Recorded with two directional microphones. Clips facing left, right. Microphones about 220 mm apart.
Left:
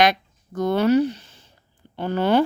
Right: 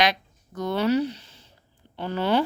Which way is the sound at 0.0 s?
50° left (ahead or behind).